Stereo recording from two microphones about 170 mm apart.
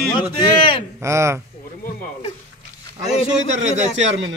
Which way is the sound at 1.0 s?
15° right (ahead or behind).